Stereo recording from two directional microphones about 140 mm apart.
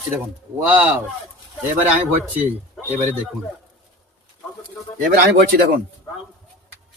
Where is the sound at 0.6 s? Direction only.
15° right (ahead or behind).